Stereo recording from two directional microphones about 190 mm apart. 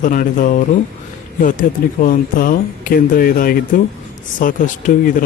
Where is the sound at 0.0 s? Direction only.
45° left (ahead or behind).